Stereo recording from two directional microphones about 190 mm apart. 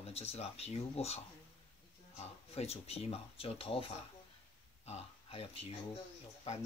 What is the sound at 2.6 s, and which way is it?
Speech, 30° left (ahead or behind).